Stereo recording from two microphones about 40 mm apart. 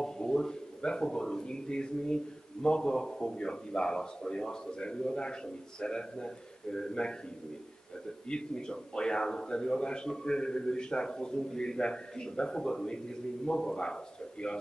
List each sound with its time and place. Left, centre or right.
0.0 s a man's voice: centre
8.3 s a man's voice: left